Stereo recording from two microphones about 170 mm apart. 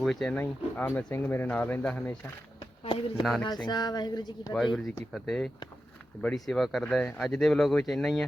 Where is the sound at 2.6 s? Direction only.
30° left (ahead or behind).